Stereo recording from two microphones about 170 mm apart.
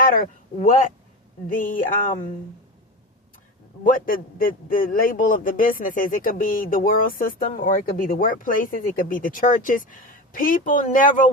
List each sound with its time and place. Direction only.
0.0 s a man's voice: 55° left (ahead or behind)
3.8 s a man's voice: 55° left (ahead or behind)